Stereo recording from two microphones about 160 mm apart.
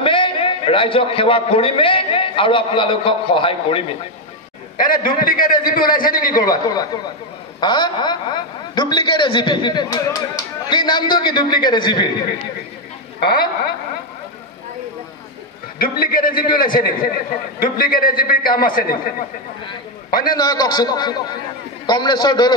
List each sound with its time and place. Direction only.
0.0 s a man's voice: 30° left (ahead or behind)
4.7 s a man's voice: 60° left (ahead or behind)
6.5 s a man's voice: 25° left (ahead or behind)
13.2 s a woman's voice: 70° left (ahead or behind)
15.8 s a man's voice: 65° left (ahead or behind)
20.3 s a man's voice: 25° left (ahead or behind)